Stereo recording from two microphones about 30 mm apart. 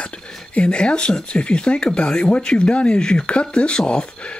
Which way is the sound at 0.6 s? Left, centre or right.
Left.